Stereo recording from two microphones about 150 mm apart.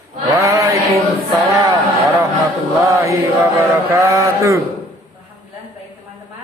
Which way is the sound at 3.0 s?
15° right (ahead or behind).